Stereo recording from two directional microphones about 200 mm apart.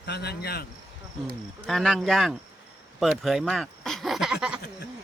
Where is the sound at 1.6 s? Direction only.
Centre (ahead or behind).